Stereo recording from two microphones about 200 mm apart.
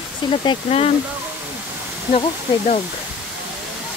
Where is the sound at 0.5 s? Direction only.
30° left (ahead or behind).